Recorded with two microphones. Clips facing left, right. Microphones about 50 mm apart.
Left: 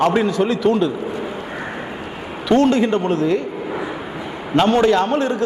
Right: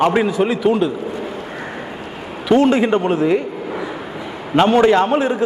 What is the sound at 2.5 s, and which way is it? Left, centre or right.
Speech, centre.